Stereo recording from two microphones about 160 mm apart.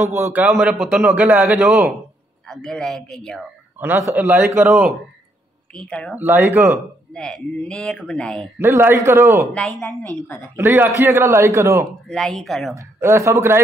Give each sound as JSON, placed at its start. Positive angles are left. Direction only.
{"t": 0.0, "sound": "a man's voice", "side_deg": -15}
{"t": 3.8, "sound": "a man's voice", "side_deg": -10}
{"t": 5.8, "sound": "speech", "side_deg": 5}
{"t": 6.1, "sound": "a man's voice", "side_deg": -10}
{"t": 6.8, "sound": "speech", "side_deg": 5}
{"t": 8.5, "sound": "a man's voice", "side_deg": -15}
{"t": 9.5, "sound": "speech", "side_deg": 0}
{"t": 10.0, "sound": "a woman's voice", "side_deg": 15}
{"t": 10.5, "sound": "a man's voice", "side_deg": -15}
{"t": 12.1, "sound": "speech", "side_deg": 5}
{"t": 12.7, "sound": "a man's voice", "side_deg": -15}